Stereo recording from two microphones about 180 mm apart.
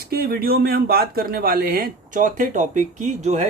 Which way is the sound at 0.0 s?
60° right (ahead or behind).